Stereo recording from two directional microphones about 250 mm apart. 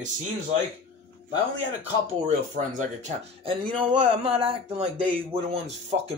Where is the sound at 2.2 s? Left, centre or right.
Right.